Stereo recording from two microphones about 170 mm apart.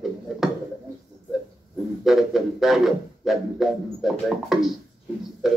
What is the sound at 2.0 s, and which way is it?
Music, centre (ahead or behind).